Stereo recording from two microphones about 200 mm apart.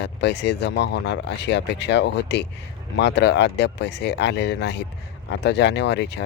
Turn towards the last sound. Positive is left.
turn(degrees=60)  # may be behind; listen again after turning